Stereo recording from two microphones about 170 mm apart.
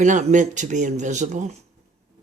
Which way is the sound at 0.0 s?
45° right (ahead or behind).